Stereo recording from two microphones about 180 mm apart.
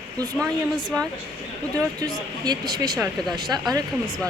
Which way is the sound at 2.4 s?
20° right (ahead or behind).